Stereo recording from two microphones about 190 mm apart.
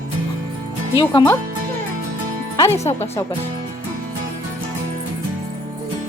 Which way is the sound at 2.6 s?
15° left (ahead or behind).